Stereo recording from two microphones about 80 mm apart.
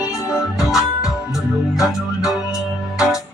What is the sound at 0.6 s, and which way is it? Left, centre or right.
Music, centre.